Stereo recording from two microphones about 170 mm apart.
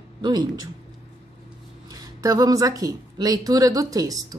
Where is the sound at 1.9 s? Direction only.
20° right (ahead or behind).